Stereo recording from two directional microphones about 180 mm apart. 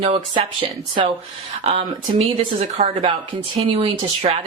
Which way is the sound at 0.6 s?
30° right (ahead or behind).